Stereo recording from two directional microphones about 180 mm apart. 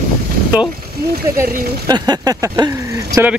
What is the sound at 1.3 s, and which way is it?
Speech, 20° right (ahead or behind).